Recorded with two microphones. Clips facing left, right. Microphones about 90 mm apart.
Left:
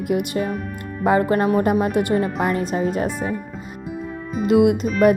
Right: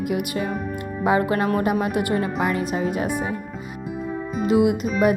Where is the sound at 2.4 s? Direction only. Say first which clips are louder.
Left 2 dB; 40° left (ahead or behind).